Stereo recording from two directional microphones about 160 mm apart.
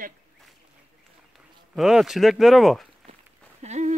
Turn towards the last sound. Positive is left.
turn(degrees=-45)  # may be behind; listen again after turning